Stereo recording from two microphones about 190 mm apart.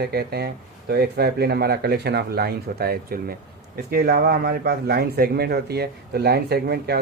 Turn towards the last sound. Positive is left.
turn(degrees=-55)  # may be behind; listen again after turning